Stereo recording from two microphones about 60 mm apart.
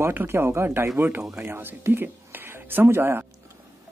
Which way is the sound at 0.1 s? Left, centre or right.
Right.